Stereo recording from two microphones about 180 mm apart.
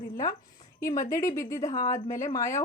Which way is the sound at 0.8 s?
15° left (ahead or behind).